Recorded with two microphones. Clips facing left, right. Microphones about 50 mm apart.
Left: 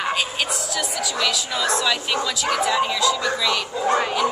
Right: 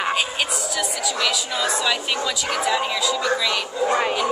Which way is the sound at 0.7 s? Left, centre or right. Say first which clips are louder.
Even; centre.